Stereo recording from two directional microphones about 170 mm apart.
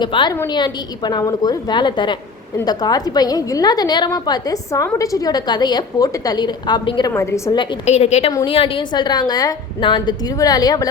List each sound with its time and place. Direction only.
0.0 s a woman's voice: 25° left (ahead or behind)
7.1 s a woman's voice: 15° left (ahead or behind)
7.9 s a woman's voice: 40° left (ahead or behind); by 10.8 s 20° left (ahead or behind)